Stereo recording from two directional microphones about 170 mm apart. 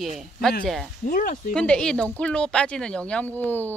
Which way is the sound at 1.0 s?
55° left (ahead or behind).